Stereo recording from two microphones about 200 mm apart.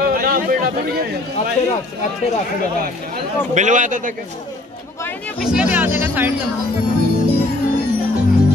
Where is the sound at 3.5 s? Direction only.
35° right (ahead or behind).